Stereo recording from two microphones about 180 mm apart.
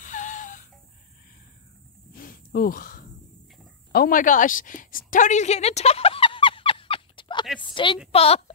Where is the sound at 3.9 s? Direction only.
55° left (ahead or behind); by 7.4 s 25° left (ahead or behind).